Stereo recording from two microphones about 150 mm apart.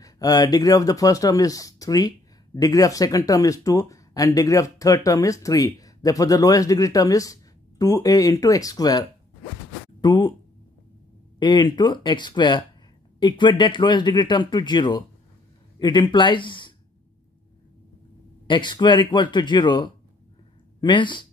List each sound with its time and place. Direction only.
0.0 s speech: 25° left (ahead or behind)
10.0 s speech: 30° left (ahead or behind)
11.3 s speech: 30° left (ahead or behind)
18.5 s speech: 30° left (ahead or behind)